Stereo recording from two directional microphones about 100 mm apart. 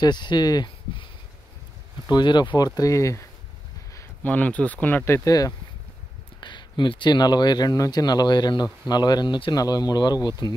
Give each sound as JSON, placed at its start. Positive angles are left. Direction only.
{"t": 0.0, "sound": "speech", "side_deg": 50}
{"t": 2.0, "sound": "speech", "side_deg": 45}
{"t": 4.2, "sound": "speech", "side_deg": 15}
{"t": 6.4, "sound": "speech", "side_deg": 50}